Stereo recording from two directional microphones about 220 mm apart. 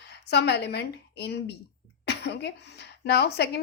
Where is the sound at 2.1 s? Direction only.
50° left (ahead or behind).